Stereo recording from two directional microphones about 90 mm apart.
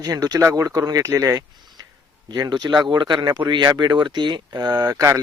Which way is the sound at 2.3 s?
50° right (ahead or behind).